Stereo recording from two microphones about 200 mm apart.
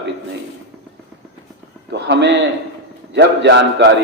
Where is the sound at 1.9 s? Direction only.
60° right (ahead or behind).